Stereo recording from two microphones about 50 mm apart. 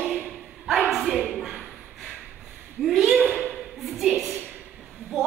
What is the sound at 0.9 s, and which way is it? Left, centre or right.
Bow-wow, centre.